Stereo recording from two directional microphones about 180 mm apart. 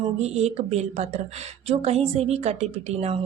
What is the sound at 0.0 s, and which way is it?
A woman's voice, 35° right (ahead or behind).